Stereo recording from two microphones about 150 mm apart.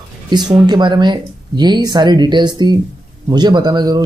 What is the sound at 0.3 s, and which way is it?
Speech, 30° right (ahead or behind).